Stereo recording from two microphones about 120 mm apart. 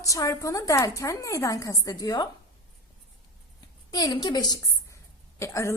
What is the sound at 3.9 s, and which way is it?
A woman's voice, 35° left (ahead or behind).